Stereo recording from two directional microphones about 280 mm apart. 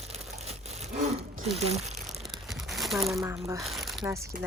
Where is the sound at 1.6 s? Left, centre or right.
Right.